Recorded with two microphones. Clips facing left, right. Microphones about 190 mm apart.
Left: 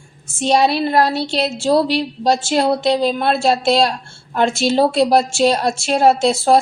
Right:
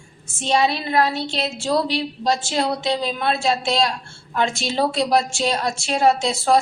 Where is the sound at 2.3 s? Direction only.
55° left (ahead or behind).